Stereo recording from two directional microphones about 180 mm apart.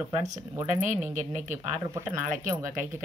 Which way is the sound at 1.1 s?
45° right (ahead or behind).